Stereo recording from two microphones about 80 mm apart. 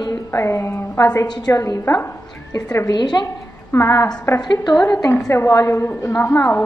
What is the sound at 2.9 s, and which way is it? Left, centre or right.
Speech, left.